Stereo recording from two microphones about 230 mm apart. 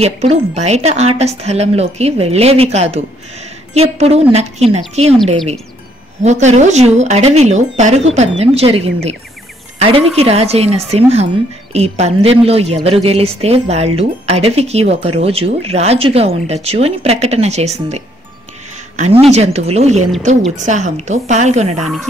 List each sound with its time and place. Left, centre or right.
0.0 s a woman's voice: right
6.2 s a woman's voice: right
19.2 s a woman's voice: right